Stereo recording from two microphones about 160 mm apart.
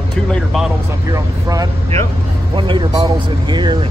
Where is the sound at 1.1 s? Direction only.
20° right (ahead or behind).